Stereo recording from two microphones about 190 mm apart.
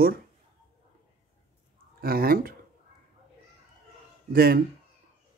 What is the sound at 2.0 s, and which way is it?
Speech, 50° right (ahead or behind).